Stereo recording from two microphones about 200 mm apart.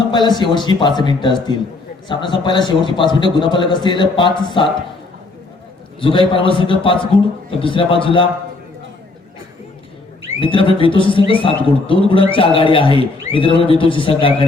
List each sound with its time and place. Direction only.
0.1 s a man's voice: 20° left (ahead or behind)
6.0 s a man's voice: 25° left (ahead or behind)
10.4 s a man's voice: 25° left (ahead or behind)